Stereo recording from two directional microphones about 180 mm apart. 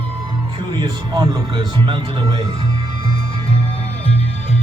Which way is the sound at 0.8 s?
20° right (ahead or behind).